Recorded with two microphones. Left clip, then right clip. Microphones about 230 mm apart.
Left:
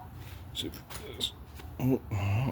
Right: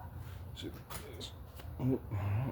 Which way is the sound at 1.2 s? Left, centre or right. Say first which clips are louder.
Left 12 dB; left.